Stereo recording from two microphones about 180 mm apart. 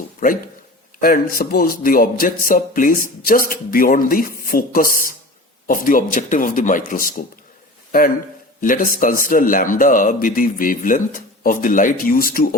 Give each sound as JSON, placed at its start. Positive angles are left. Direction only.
{"t": 1.0, "sound": "speech", "side_deg": 55}
{"t": 8.6, "sound": "speech", "side_deg": 50}